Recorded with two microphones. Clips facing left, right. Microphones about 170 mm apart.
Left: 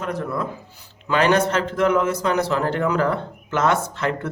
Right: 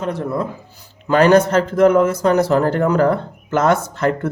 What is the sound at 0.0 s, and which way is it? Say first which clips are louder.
Speech: right 4 dB; 25° right (ahead or behind).